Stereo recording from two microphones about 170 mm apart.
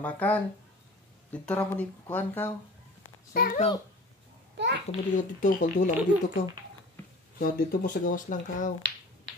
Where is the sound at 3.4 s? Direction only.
60° left (ahead or behind).